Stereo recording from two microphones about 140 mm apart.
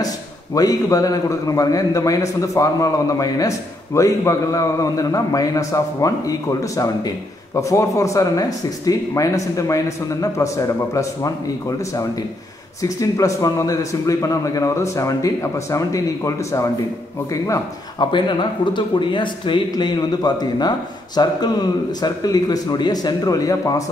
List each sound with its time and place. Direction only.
0.6 s a man's voice: 25° left (ahead or behind)
12.8 s a man's voice: 25° left (ahead or behind)
18.7 s a man's voice: 35° left (ahead or behind)